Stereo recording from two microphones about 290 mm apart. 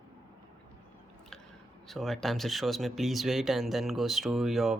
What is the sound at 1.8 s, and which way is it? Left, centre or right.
Speech, centre.